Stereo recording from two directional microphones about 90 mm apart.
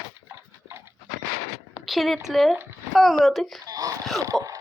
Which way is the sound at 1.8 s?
Centre (ahead or behind).